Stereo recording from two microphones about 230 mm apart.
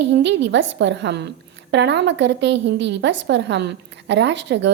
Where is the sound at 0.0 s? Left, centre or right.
Right.